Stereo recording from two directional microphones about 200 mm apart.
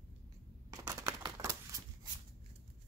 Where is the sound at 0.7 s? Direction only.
15° right (ahead or behind).